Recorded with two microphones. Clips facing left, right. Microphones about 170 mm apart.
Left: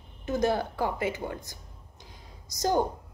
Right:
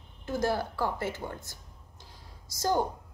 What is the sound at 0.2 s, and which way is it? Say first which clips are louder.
A woman's voice: left 3 dB; 20° left (ahead or behind).